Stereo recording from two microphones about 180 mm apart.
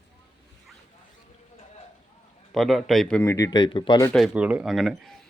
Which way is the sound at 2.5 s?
Centre (ahead or behind).